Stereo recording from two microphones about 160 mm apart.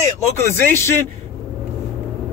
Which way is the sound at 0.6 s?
15° left (ahead or behind).